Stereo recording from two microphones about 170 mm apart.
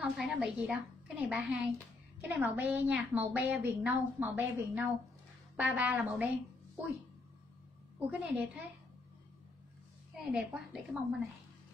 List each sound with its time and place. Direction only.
0.0 s a woman's voice: 5° right (ahead or behind)
8.0 s a woman's voice: 5° right (ahead or behind)
10.1 s a woman's voice: 5° right (ahead or behind)